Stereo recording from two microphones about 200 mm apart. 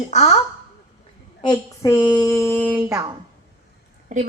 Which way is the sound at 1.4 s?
20° left (ahead or behind).